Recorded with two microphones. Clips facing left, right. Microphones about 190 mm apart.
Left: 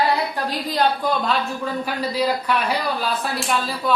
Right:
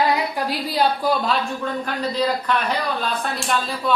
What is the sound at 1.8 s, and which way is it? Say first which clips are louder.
Speech: left 1 dB; 10° left (ahead or behind).